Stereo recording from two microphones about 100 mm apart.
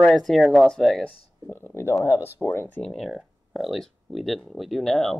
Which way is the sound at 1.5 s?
20° left (ahead or behind).